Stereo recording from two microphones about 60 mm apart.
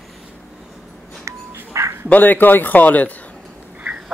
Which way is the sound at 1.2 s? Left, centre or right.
Right.